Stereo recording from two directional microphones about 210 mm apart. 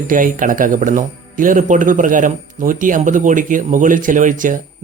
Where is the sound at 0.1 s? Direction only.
40° right (ahead or behind).